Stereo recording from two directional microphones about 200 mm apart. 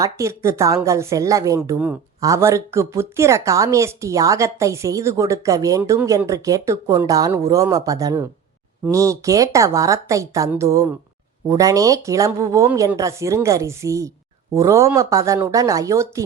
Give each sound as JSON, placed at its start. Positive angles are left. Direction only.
{"t": 0.0, "sound": "a woman's voice", "side_deg": -15}